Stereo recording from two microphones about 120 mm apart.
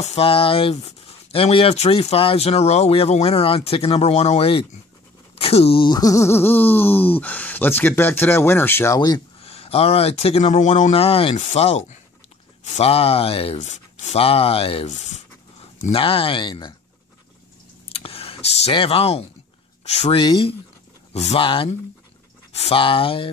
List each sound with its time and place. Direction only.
0.0 s speech: 55° left (ahead or behind)
1.8 s speech: 60° left (ahead or behind)
5.9 s speech: 30° left (ahead or behind)
9.4 s speech: 55° left (ahead or behind); by 10.9 s 80° left
10.9 s speech: 55° left (ahead or behind)
11.3 s speech: 65° left (ahead or behind)
13.6 s speech: 70° left (ahead or behind); by 16.7 s 40° left (ahead or behind)
17.8 s a sound: 55° left (ahead or behind)
18.7 s speech: 50° left (ahead or behind)
20.2 s speech: 45° left (ahead or behind)
21.1 s speech: 60° left (ahead or behind); by 21.6 s 45° left (ahead or behind)
22.5 s speech: 60° left (ahead or behind)